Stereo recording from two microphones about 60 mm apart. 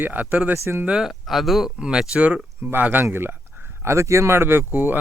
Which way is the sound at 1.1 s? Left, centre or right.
Centre.